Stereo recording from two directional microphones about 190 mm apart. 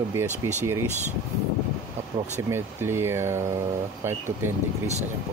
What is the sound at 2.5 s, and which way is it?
Speech, 15° right (ahead or behind).